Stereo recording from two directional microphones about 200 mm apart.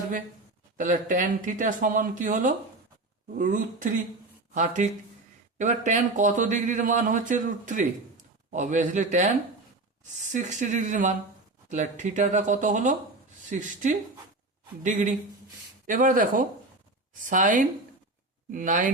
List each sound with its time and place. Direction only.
0.8 s speech: 40° right (ahead or behind)
10.3 s speech: 40° right (ahead or behind)